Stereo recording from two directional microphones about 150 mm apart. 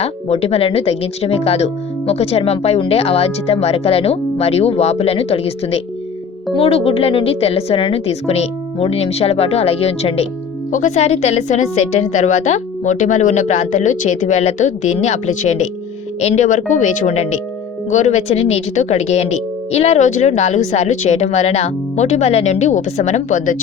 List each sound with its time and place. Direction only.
0.0 s a woman's voice: 45° left (ahead or behind)
10.7 s speech: 55° left (ahead or behind)